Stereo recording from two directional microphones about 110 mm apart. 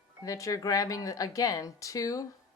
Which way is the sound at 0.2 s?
30° left (ahead or behind).